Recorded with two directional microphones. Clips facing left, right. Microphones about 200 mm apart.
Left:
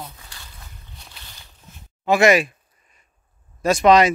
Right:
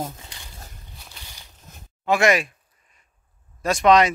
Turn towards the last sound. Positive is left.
turn(degrees=5)  # may be behind; listen again after turning